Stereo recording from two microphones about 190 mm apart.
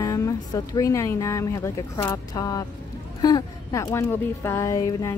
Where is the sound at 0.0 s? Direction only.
15° left (ahead or behind).